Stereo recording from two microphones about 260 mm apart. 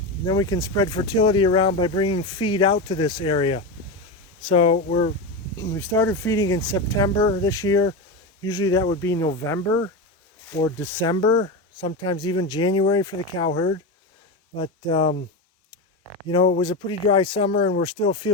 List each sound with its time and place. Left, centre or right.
0.3 s speech: centre
5.5 s speech: centre
16.2 s speech: centre